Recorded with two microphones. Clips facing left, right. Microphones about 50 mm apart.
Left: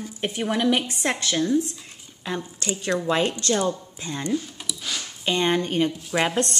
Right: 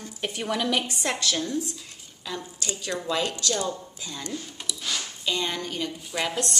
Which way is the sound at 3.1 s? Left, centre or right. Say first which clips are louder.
Left 3 dB; left.